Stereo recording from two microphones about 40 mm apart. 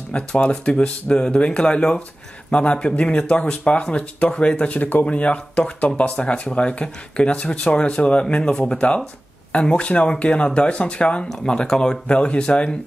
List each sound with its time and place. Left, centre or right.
0.1 s speech: left
1.6 s speech: left
4.6 s speech: left
5.0 s speech: left
11.2 s speech: centre
12.1 s speech: left